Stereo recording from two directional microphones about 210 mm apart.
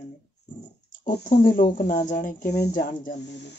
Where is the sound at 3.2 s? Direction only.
55° left (ahead or behind).